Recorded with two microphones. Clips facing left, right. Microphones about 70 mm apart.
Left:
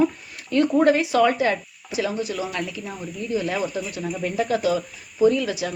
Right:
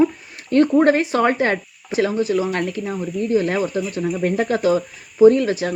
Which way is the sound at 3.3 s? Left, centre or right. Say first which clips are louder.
Right 6 dB; right.